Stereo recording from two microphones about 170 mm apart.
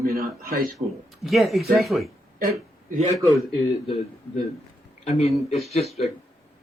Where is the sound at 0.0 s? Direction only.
60° right (ahead or behind).